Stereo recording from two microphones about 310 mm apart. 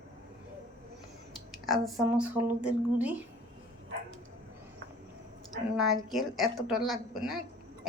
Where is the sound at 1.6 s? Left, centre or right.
Centre.